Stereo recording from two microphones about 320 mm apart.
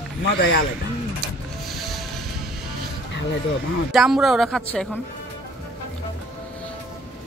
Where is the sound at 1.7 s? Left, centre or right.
Centre.